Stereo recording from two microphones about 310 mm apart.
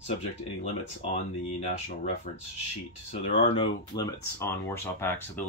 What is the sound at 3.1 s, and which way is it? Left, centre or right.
Speech, centre.